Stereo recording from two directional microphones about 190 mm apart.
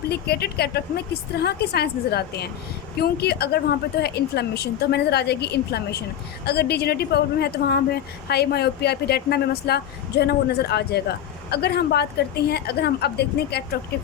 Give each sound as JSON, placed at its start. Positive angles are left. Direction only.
{"t": 0.1, "sound": "speech", "side_deg": 55}